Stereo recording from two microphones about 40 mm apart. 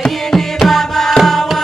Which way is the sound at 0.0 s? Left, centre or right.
Centre.